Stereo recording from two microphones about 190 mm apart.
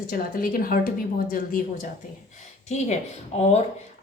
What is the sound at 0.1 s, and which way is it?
Speech, 50° left (ahead or behind).